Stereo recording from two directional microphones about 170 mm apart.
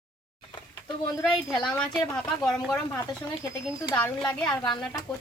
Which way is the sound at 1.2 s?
Centre (ahead or behind).